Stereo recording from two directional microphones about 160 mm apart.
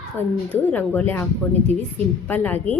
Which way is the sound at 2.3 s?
10° left (ahead or behind).